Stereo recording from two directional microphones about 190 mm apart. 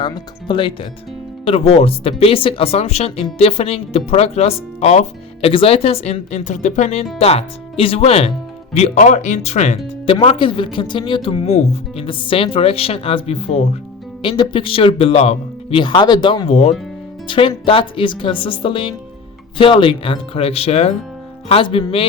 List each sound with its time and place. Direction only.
0.0 s speech: 25° left (ahead or behind)